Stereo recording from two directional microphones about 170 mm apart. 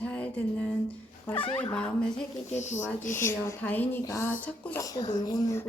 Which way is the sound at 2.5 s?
45° left (ahead or behind).